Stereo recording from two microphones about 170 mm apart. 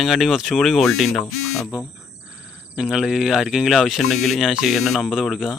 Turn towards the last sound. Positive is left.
turn(degrees=0)  # may be behind; listen again after turning